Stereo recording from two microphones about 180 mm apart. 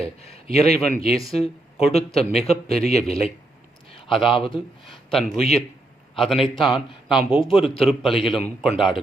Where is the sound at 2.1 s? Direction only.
35° left (ahead or behind).